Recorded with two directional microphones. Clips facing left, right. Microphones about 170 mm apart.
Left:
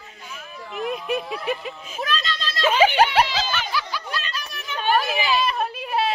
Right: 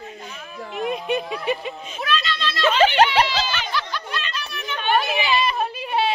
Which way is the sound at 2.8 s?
10° left (ahead or behind).